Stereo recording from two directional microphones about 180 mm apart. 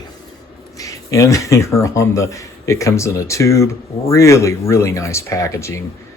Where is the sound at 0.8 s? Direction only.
20° left (ahead or behind).